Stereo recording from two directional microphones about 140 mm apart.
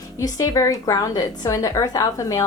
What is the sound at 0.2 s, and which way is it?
A woman's voice, 25° left (ahead or behind).